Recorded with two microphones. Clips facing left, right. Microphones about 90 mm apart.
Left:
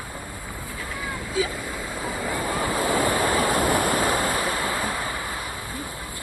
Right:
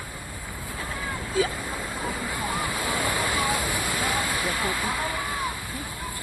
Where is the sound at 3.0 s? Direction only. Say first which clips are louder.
Left 4 dB; 45° left (ahead or behind).